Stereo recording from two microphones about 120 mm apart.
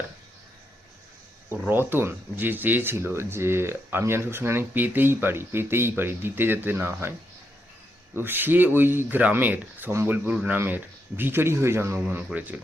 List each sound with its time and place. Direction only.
1.5 s speech: 15° right (ahead or behind)
8.1 s speech: 15° right (ahead or behind)